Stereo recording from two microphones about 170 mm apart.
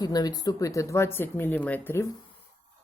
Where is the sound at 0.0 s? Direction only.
20° left (ahead or behind).